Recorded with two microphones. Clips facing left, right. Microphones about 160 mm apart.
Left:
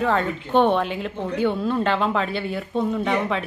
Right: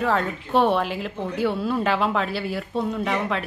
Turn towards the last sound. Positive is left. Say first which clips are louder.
# left 2 dB
turn(degrees=0)  # may be behind; listen again after turning